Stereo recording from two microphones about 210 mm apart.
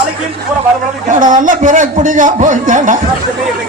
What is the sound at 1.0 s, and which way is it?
A man's voice, 40° right (ahead or behind).